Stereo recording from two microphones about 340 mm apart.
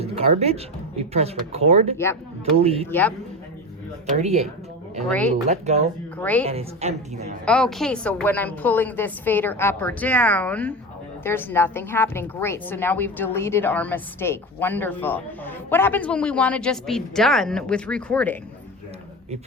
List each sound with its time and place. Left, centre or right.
0.0 s speech: centre
4.1 s a woman's voice: centre
6.1 s a woman's voice: centre
6.4 s a woman's voice: centre
7.4 s a woman's voice: centre